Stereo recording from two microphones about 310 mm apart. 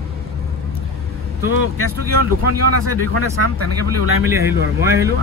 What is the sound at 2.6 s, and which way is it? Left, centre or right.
Speech, right.